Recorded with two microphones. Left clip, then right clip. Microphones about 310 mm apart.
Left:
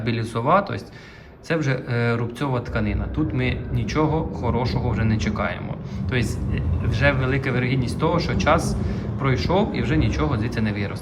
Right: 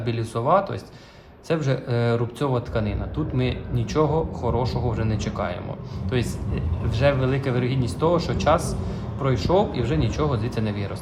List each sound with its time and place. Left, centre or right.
0.0 s a man's voice: centre